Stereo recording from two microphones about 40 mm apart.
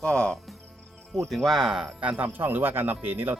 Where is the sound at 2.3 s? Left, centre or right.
Right.